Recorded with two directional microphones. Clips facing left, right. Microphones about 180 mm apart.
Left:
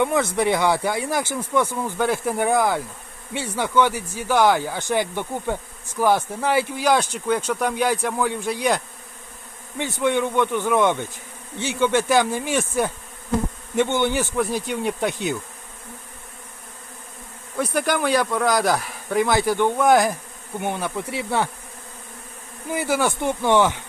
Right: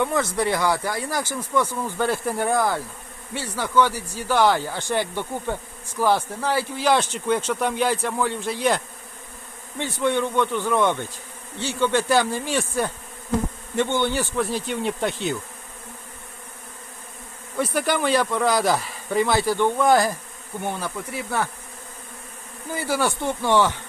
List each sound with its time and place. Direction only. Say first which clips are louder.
0.0 s speech: left 2 dB; 20° left (ahead or behind)
17.8 s speech: even; 15° left (ahead or behind)
22.7 s speech: left 2 dB; 15° left (ahead or behind)